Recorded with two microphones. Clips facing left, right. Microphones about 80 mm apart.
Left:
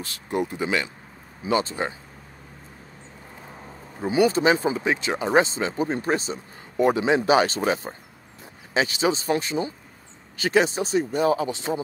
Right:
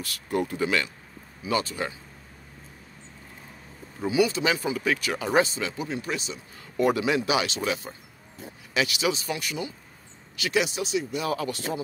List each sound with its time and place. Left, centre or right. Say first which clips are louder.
0.0 s speech: left 1 dB; left
4.1 s speech: left 5 dB; left
6.8 s speech: left 3 dB; left
11.3 s speech: left 3 dB; left